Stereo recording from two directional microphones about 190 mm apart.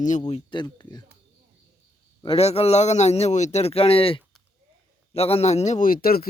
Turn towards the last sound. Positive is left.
turn(degrees=50)  # may be behind; listen again after turning